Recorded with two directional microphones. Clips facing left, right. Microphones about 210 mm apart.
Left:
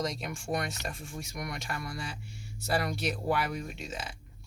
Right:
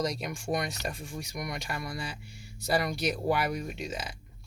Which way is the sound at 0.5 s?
Centre (ahead or behind).